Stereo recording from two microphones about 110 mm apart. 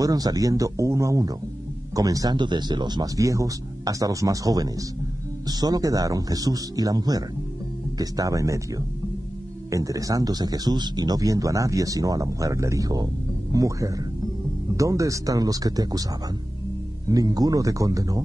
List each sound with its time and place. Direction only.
0.0 s speech: 35° right (ahead or behind)
17.1 s speech: 35° right (ahead or behind)